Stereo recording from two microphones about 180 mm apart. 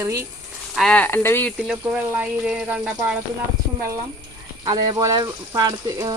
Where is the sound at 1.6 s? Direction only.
5° right (ahead or behind).